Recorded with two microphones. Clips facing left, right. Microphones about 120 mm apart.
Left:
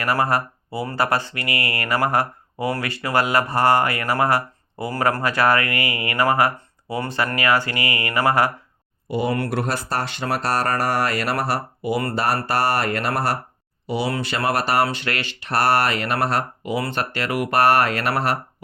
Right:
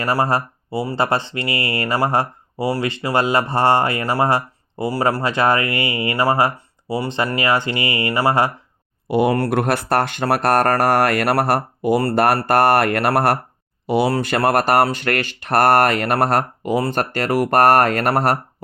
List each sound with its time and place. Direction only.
0.0 s speech: 30° right (ahead or behind)
9.0 s speech: 60° right (ahead or behind)